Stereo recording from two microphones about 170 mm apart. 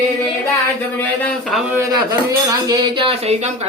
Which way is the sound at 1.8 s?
20° right (ahead or behind).